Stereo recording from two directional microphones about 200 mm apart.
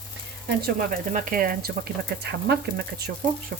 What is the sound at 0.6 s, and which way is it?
Speech, 45° right (ahead or behind).